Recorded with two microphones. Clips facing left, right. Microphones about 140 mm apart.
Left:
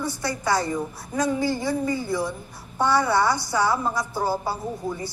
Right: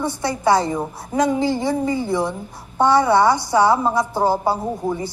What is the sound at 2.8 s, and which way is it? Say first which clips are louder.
Speech: right 6 dB; 60° right (ahead or behind).